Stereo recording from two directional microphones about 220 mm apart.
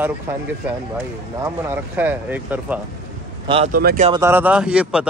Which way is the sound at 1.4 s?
10° right (ahead or behind).